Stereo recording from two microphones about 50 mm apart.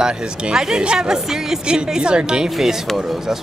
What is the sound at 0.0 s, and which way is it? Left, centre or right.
Speech, centre.